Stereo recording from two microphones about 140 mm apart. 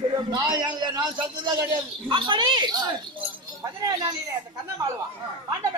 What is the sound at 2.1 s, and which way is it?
Speech, 35° right (ahead or behind).